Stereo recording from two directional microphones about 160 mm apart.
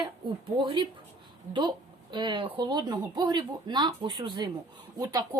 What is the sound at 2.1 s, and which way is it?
Speech, 30° right (ahead or behind).